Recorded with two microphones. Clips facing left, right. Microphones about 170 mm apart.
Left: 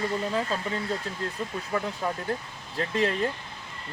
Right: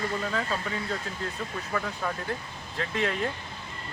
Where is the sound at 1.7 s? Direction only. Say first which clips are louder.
Left 2 dB; 20° left (ahead or behind).